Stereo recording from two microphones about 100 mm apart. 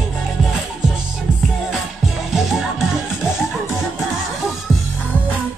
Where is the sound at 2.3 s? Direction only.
Centre (ahead or behind).